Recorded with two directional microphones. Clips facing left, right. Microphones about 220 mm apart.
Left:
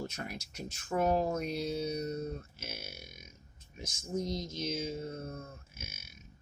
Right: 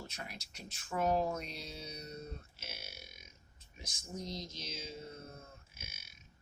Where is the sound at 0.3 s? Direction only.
45° left (ahead or behind).